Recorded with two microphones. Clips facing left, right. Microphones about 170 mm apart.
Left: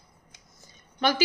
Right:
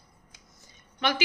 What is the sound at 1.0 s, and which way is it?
Speech, 40° left (ahead or behind).